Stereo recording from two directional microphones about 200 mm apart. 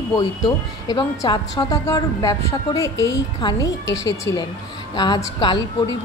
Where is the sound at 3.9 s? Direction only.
15° left (ahead or behind).